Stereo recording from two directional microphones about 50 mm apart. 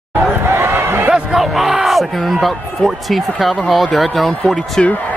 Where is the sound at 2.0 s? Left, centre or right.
Centre.